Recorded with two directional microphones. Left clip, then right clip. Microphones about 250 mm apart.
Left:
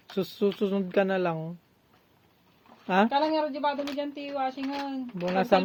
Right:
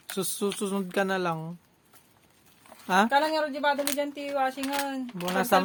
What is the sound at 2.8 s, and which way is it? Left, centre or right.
Speech, centre.